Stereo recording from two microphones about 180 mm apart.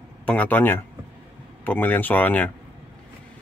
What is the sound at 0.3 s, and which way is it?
Speech, 10° left (ahead or behind).